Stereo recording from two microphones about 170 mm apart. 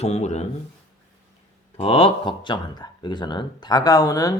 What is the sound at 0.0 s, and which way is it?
Speech, 40° left (ahead or behind).